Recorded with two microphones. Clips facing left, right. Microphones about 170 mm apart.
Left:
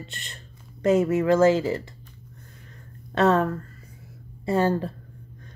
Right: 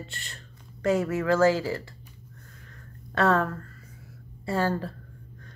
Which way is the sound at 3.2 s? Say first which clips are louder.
Left 3 dB; 20° left (ahead or behind).